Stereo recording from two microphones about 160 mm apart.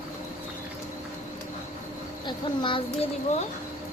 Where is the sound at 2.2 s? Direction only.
30° left (ahead or behind).